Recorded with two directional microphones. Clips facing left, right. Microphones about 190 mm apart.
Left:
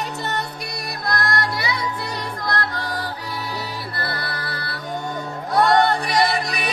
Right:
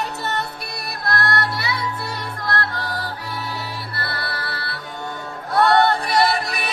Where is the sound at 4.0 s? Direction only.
20° left (ahead or behind).